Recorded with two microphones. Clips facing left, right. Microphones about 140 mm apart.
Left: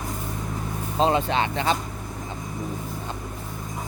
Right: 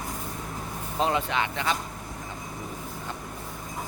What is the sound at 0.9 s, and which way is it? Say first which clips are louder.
Speech: left 4 dB; 30° left (ahead or behind).